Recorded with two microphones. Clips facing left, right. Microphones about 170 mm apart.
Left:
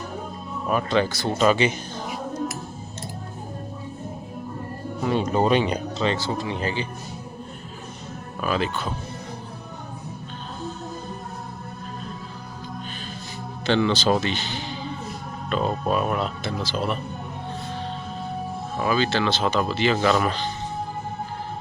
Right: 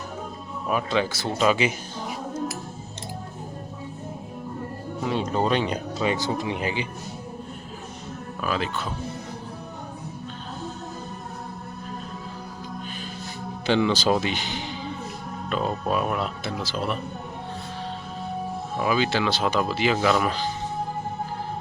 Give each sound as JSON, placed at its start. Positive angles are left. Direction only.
{"t": 0.7, "sound": "speech", "side_deg": -5}
{"t": 5.0, "sound": "speech", "side_deg": 5}
{"t": 6.0, "sound": "speech", "side_deg": -15}
{"t": 8.4, "sound": "speech", "side_deg": 0}
{"t": 13.7, "sound": "speech", "side_deg": -10}
{"t": 15.4, "sound": "speech", "side_deg": -5}
{"t": 18.8, "sound": "speech", "side_deg": -10}